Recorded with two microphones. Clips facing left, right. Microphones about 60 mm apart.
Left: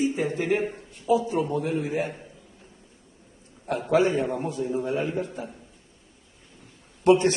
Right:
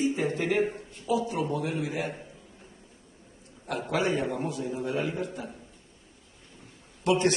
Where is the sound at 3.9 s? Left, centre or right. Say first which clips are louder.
Left 6 dB; left.